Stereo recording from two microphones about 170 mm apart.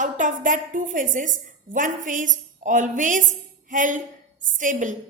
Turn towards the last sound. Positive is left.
turn(degrees=-50)  # may be behind; listen again after turning